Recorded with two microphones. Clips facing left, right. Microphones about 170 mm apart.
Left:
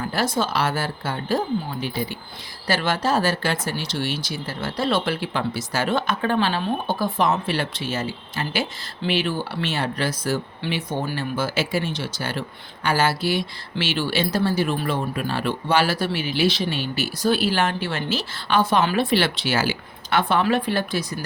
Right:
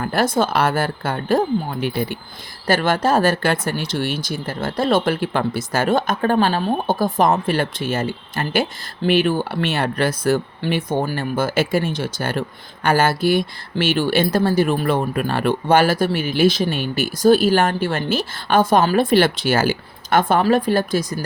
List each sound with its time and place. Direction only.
0.0 s speech: 55° right (ahead or behind)